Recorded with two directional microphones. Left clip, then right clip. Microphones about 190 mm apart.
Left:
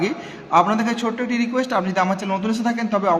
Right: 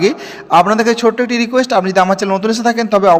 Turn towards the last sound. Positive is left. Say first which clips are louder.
# right 10 dB
turn(degrees=-40)  # may be behind; listen again after turning